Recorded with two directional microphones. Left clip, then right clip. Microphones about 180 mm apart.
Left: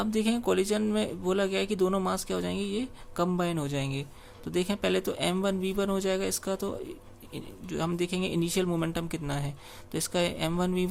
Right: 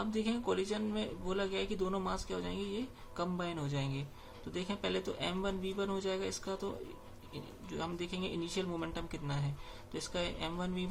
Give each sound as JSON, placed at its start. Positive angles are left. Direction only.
{"t": 0.0, "sound": "a man's voice", "side_deg": 50}